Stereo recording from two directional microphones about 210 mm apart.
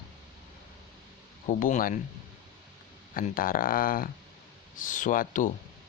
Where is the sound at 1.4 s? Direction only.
35° left (ahead or behind).